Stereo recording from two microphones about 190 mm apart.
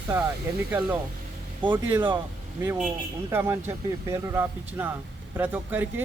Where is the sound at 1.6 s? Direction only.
25° right (ahead or behind).